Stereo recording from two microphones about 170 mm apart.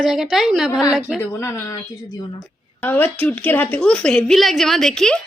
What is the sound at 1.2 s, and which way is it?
A woman's voice, 15° left (ahead or behind).